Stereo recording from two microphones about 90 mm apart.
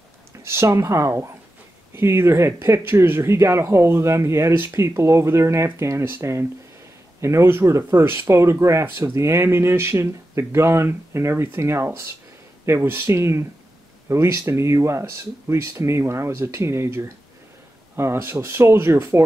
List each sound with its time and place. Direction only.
0.4 s speech: 30° right (ahead or behind)